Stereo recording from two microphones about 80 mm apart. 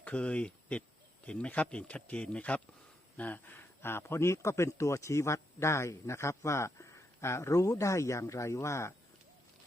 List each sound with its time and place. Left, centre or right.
0.0 s speech: centre; by 9.0 s left